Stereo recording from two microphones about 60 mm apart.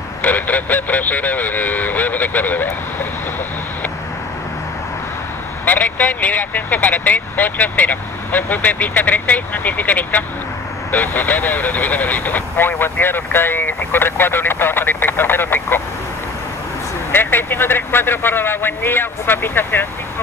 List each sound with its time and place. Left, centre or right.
0.2 s vehicle: left
5.7 s speech: left
17.1 s speech: left